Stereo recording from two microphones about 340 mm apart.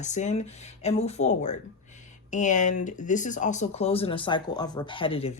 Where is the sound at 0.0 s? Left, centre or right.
Left.